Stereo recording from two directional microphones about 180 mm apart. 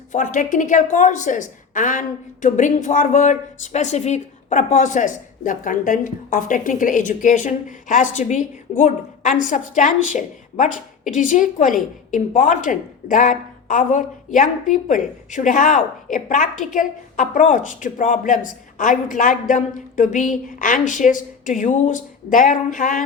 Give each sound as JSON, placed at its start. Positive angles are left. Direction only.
{"t": 0.1, "sound": "a woman's voice", "side_deg": 45}